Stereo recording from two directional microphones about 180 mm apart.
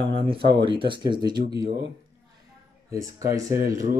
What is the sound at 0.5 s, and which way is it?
Speech, 25° right (ahead or behind).